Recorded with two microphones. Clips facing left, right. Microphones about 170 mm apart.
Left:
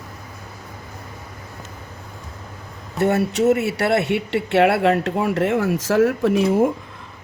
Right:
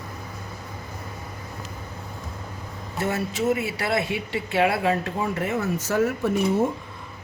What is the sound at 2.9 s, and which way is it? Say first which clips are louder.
Speech: left 8 dB; 65° left (ahead or behind).